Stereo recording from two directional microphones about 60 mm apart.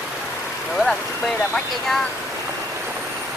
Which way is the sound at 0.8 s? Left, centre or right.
Centre.